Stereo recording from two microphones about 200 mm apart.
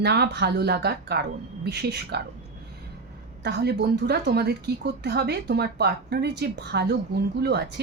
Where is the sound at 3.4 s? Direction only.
55° right (ahead or behind).